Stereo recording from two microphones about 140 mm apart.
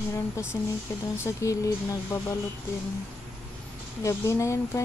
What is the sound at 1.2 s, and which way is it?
Speech, 25° left (ahead or behind).